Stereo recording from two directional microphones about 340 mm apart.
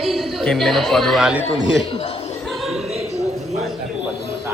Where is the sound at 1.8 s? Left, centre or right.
Centre.